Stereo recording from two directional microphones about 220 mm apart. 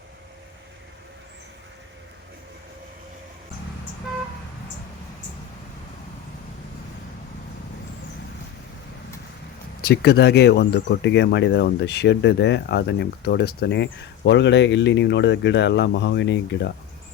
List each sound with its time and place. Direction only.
9.8 s speech: 45° left (ahead or behind)